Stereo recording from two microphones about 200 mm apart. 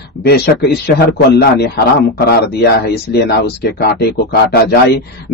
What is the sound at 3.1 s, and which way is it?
Speech, 50° left (ahead or behind).